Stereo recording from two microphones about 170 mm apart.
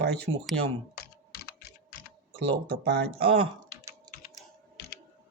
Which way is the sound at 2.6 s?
65° right (ahead or behind).